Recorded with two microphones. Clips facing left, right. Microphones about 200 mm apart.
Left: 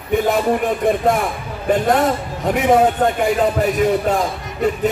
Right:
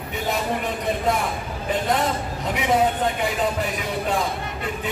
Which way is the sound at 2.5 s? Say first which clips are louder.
Left 7 dB; 50° left (ahead or behind).